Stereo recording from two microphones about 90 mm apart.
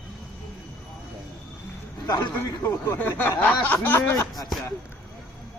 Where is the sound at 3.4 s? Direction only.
15° left (ahead or behind).